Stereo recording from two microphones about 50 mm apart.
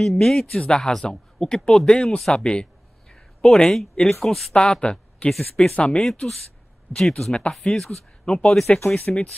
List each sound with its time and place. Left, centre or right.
0.0 s speech: centre
2.0 s a sound: centre
3.6 s speech: centre
4.6 s speech: centre
5.8 s speech: left
6.9 s speech: centre